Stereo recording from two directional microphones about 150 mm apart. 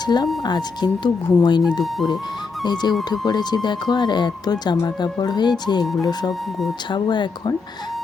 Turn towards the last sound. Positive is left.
turn(degrees=30)  # may be behind; listen again after turning